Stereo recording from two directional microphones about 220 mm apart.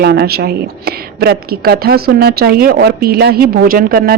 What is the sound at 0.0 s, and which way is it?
A woman's voice, 50° right (ahead or behind).